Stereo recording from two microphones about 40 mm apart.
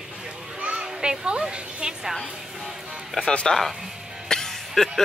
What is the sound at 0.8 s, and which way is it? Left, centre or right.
Children playing, centre.